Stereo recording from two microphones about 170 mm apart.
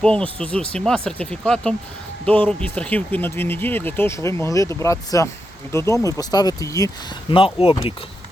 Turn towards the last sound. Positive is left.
turn(degrees=30)  # may be behind; listen again after turning